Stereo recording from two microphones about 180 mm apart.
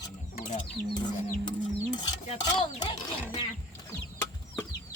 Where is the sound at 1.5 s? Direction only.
25° left (ahead or behind).